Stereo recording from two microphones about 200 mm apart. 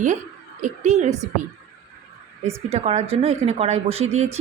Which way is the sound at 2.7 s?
30° right (ahead or behind).